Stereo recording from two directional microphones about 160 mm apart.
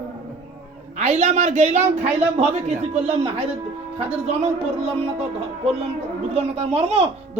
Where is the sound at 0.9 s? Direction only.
45° right (ahead or behind).